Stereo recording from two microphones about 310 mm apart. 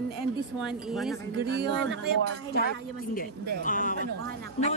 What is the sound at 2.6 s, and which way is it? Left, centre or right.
A woman's voice, left.